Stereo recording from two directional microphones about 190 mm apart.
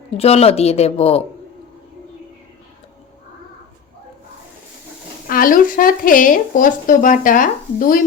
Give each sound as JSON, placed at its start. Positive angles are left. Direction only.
{"t": 0.2, "sound": "speech", "side_deg": 30}
{"t": 5.3, "sound": "speech", "side_deg": 45}